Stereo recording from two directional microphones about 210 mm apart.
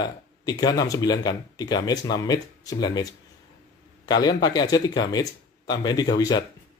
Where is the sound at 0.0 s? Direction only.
20° left (ahead or behind).